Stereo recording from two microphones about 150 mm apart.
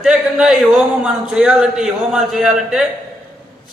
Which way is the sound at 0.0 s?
5° right (ahead or behind).